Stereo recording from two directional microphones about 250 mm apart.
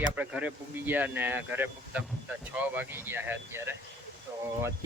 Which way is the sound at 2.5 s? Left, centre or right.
Centre.